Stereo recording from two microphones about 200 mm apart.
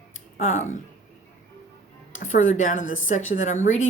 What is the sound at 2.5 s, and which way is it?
Speech, 40° left (ahead or behind).